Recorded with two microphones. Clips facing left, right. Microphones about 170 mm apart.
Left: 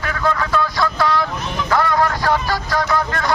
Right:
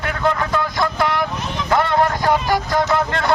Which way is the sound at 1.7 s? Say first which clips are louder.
Right 1 dB; 25° right (ahead or behind).